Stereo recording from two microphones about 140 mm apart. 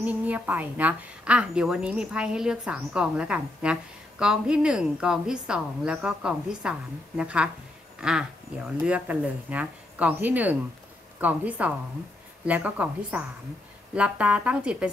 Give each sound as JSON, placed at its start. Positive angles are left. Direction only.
{"t": 0.0, "sound": "a woman's voice", "side_deg": -10}